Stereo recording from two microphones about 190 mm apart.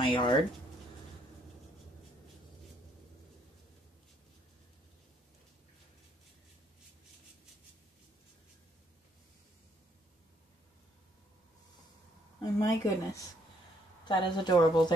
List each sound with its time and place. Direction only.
0.0 s a woman's voice: 25° left (ahead or behind)
12.4 s a woman's voice: 15° left (ahead or behind)